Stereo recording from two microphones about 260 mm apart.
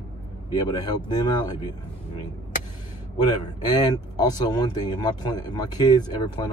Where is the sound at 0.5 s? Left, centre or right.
Centre.